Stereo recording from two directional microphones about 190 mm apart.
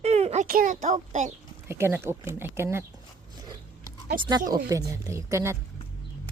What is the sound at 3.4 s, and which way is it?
Biting, 20° right (ahead or behind).